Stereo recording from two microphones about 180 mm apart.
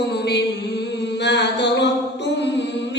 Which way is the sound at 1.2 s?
70° left (ahead or behind).